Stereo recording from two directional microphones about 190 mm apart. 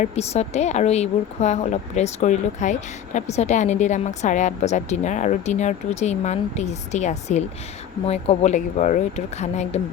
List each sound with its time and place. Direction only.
0.0 s a woman's voice: 35° left (ahead or behind)